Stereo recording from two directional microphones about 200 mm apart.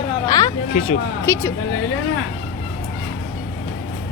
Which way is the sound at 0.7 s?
35° left (ahead or behind).